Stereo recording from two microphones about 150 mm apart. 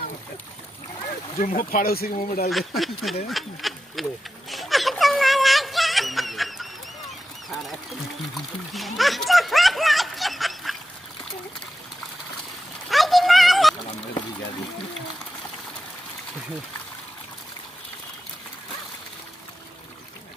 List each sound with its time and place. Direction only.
1.4 s speech: 70° left (ahead or behind)
2.5 s speech: centre (ahead or behind)
4.5 s synthetic singing: centre (ahead or behind)
8.4 s splash: centre (ahead or behind)
12.9 s a sound: centre (ahead or behind)